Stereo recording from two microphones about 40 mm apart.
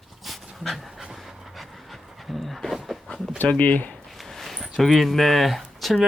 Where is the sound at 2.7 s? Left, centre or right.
Centre.